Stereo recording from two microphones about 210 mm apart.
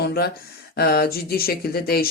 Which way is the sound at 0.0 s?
45° left (ahead or behind).